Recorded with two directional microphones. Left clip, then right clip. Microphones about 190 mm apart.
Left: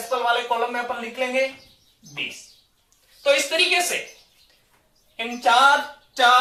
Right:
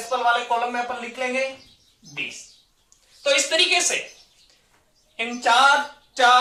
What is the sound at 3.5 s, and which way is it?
Speech, 25° right (ahead or behind).